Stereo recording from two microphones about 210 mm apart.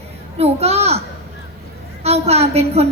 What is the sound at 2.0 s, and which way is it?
Speech, 30° right (ahead or behind).